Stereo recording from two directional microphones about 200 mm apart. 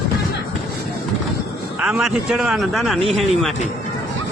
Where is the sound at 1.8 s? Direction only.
Centre (ahead or behind).